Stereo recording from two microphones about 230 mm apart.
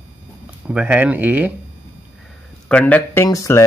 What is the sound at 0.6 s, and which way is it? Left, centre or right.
Speech, centre.